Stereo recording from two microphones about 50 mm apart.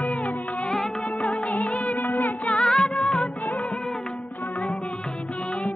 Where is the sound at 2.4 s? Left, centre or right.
Centre.